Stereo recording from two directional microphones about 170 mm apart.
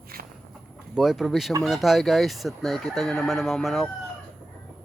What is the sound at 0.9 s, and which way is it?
Speech, centre (ahead or behind).